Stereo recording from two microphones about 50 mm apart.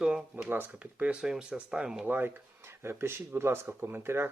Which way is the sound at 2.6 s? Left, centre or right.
Right.